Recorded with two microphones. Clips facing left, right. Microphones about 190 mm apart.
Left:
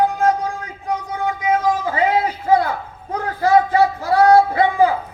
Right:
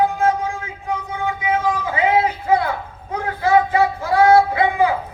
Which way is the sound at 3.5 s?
35° left (ahead or behind).